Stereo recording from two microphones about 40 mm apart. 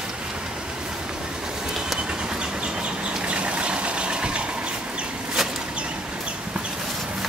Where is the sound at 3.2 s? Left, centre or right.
Right.